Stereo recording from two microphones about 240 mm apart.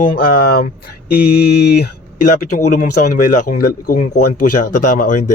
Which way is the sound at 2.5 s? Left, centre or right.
Left.